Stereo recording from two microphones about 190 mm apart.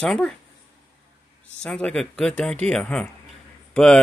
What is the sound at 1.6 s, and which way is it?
Speech, 5° left (ahead or behind).